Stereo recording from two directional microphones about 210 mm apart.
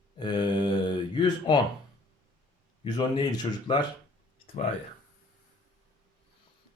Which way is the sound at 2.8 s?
20° left (ahead or behind).